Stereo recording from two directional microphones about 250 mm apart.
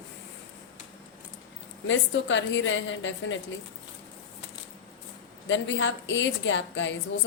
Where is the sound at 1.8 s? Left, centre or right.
Left.